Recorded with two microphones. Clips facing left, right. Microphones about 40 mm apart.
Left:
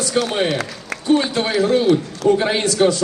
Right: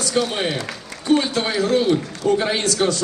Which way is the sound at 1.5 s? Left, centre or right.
Centre.